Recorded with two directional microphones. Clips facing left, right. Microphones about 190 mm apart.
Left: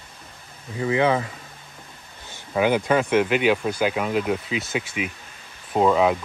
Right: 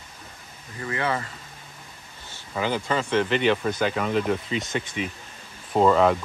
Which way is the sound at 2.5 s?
15° left (ahead or behind).